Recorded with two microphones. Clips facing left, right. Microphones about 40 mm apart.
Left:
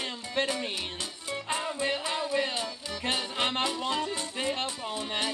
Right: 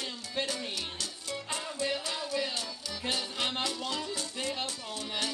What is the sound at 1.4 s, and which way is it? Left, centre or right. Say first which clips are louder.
Music: left 4 dB; left.